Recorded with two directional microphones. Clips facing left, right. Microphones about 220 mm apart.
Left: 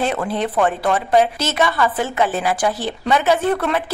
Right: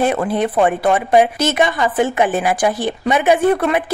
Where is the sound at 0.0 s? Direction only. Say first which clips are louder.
Right 4 dB; 15° right (ahead or behind).